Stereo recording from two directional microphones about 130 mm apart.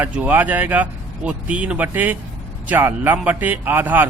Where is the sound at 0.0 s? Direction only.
15° right (ahead or behind).